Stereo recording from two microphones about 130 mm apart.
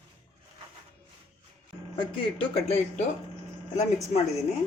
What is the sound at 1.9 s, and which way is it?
Speech, 40° left (ahead or behind).